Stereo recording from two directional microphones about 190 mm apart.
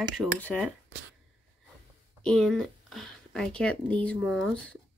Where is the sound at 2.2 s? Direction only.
5° left (ahead or behind).